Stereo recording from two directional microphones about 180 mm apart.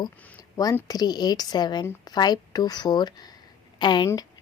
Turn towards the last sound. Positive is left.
turn(degrees=20)  # may be behind; listen again after turning